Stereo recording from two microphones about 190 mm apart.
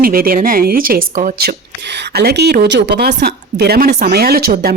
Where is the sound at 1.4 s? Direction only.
60° right (ahead or behind).